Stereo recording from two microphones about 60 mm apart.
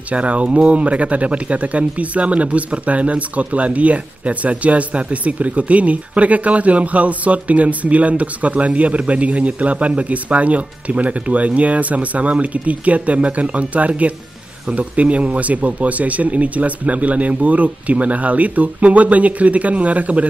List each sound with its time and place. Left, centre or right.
0.1 s speech: right